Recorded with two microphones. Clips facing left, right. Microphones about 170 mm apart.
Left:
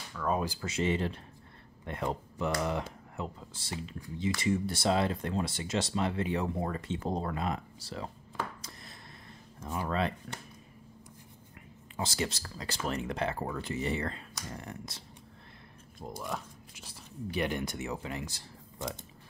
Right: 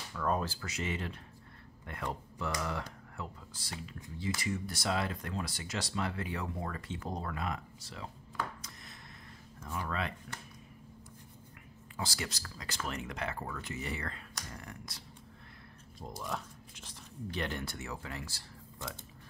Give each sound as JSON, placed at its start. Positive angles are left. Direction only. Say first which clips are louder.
{"t": 0.1, "sound": "a sound", "louder": "left 1 dB", "side_deg": 0}
{"t": 0.6, "sound": "speech", "louder": "left 7 dB", "side_deg": 30}
{"t": 9.8, "sound": "speech", "louder": "left 5 dB", "side_deg": 30}
{"t": 12.0, "sound": "speech", "louder": "left 5 dB", "side_deg": 25}
{"t": 16.0, "sound": "speech", "louder": "left 2 dB", "side_deg": 5}